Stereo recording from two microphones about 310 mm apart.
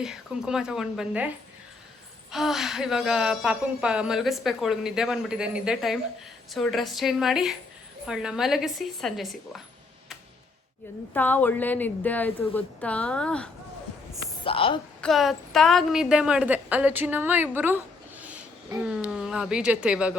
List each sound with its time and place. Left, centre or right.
0.0 s a woman's voice: centre
2.3 s a woman's voice: centre
11.1 s a woman's voice: centre
14.4 s a woman's voice: centre
15.0 s a woman's voice: centre